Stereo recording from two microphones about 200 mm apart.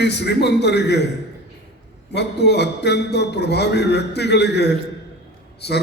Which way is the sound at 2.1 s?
55° left (ahead or behind).